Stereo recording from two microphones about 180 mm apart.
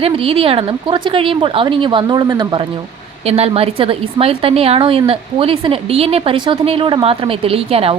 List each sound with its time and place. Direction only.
0.0 s a woman's voice: 30° right (ahead or behind)